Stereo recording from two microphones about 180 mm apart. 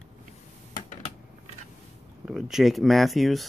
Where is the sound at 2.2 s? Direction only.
5° right (ahead or behind).